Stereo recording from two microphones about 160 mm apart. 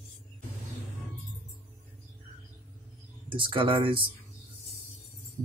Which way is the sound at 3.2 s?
30° right (ahead or behind).